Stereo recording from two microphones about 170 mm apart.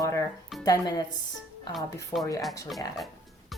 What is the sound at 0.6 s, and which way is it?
Speech, 20° left (ahead or behind).